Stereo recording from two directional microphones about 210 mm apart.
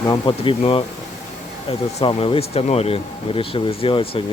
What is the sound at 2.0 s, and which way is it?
Speech, 25° left (ahead or behind).